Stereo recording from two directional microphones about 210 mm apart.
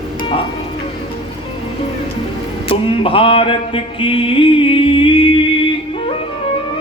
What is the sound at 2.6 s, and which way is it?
Music, 25° left (ahead or behind).